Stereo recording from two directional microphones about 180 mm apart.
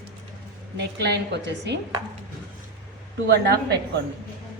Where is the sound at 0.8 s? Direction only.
70° right (ahead or behind).